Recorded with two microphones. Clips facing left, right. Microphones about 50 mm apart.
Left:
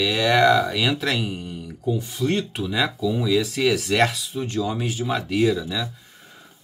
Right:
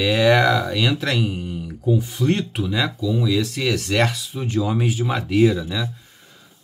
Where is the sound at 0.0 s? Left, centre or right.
Centre.